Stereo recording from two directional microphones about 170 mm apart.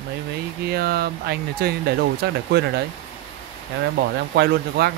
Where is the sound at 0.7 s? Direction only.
65° right (ahead or behind).